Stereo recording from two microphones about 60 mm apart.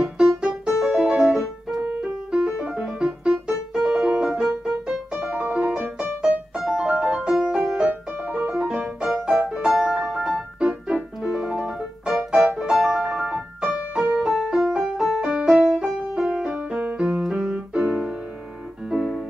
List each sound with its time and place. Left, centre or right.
0.4 s music: centre
10.0 s piano: centre
11.2 s music: centre
12.9 s music: centre
13.3 s keyboard: centre
14.7 s music: centre
15.0 s music: centre
15.3 s music: centre
17.2 s piano: centre